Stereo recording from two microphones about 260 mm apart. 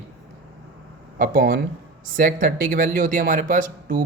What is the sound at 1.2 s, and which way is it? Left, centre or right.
Speech, right.